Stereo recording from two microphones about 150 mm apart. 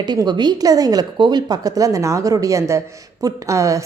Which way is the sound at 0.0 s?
30° right (ahead or behind).